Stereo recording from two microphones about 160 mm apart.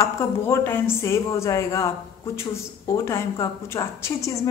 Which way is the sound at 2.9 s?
15° left (ahead or behind).